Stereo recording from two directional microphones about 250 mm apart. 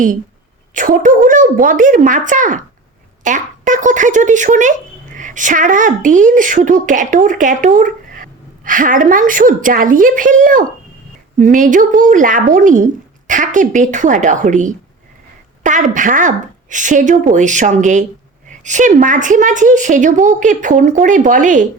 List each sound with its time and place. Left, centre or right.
0.7 s speech: right